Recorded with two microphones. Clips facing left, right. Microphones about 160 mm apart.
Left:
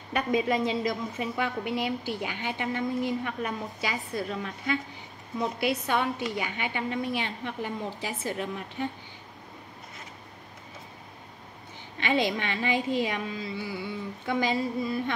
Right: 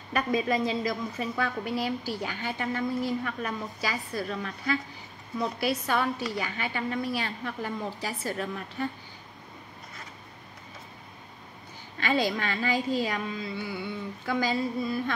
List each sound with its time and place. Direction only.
0.1 s a woman's voice: 20° left (ahead or behind)
12.0 s a woman's voice: 20° left (ahead or behind)